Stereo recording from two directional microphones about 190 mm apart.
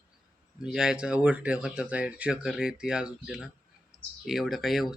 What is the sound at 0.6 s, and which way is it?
Speech, 5° right (ahead or behind).